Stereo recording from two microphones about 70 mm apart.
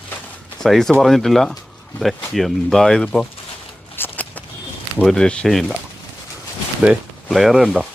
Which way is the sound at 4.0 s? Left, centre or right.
Left.